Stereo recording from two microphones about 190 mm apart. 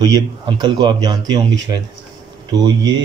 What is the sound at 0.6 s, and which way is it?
A man's voice, 20° right (ahead or behind).